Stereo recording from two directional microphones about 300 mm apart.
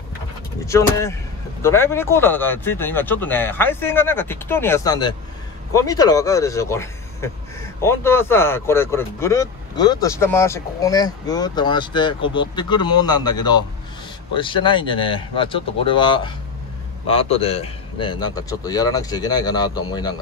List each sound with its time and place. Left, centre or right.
0.7 s speech: centre